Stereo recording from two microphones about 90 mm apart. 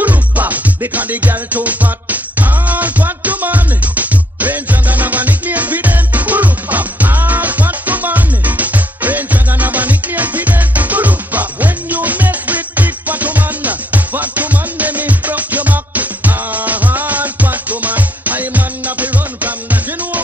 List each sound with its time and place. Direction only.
0.0 s music: 20° right (ahead or behind)